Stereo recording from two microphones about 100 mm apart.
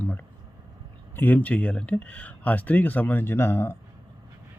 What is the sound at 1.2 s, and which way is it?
Speech, 15° left (ahead or behind).